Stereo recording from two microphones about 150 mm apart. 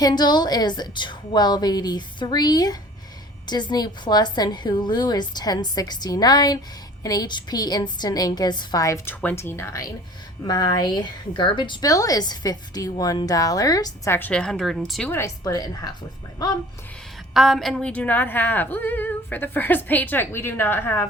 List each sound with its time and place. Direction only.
0.0 s a woman's voice: 30° left (ahead or behind); by 15.1 s centre (ahead or behind)
15.1 s a woman's voice: 20° left (ahead or behind)
17.3 s a woman's voice: centre (ahead or behind); by 21.1 s 15° left (ahead or behind)